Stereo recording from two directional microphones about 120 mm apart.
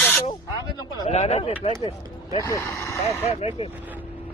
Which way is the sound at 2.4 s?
25° left (ahead or behind).